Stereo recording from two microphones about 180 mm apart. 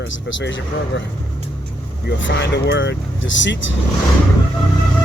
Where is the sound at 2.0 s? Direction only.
75° left (ahead or behind).